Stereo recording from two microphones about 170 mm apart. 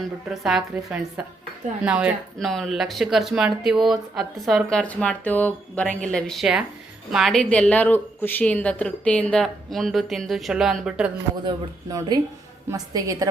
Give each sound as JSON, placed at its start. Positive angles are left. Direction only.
{"t": 0.3, "sound": "speech", "side_deg": -5}
{"t": 11.4, "sound": "speech", "side_deg": -20}